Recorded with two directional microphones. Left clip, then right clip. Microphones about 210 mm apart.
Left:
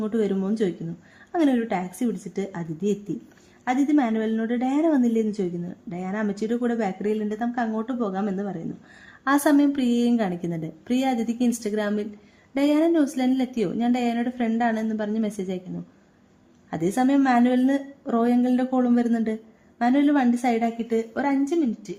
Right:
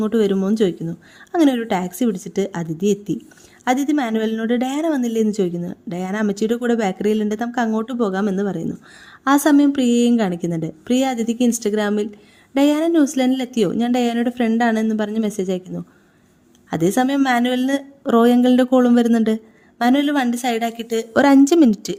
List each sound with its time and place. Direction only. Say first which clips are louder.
0.0 s a woman's voice: right 7 dB; 30° right (ahead or behind)
16.6 s speech: right 5 dB; 30° right (ahead or behind); by 21.9 s 50° right (ahead or behind)